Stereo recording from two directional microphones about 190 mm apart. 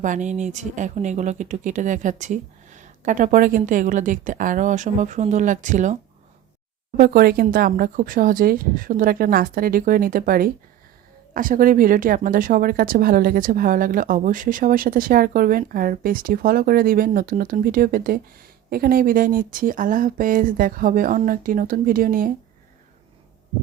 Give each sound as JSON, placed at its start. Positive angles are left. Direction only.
{"t": 0.0, "sound": "speech", "side_deg": -40}
{"t": 6.9, "sound": "speech", "side_deg": -50}